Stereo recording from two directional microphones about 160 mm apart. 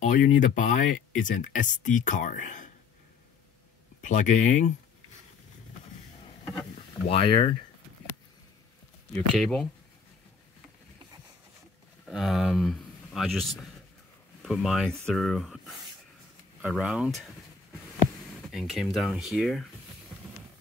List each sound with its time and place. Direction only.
0.0 s speech: 55° left (ahead or behind)
4.0 s speech: 50° left (ahead or behind)
7.1 s speech: 35° left (ahead or behind)
9.3 s speech: 5° left (ahead or behind)
12.1 s speech: centre (ahead or behind)
18.5 s speech: 5° right (ahead or behind)